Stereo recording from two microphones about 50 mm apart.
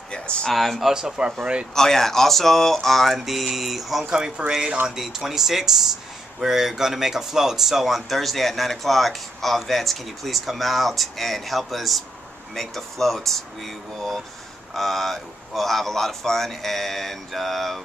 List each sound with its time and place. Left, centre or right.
0.1 s a sound: centre
0.5 s speech: centre
1.8 s speech: centre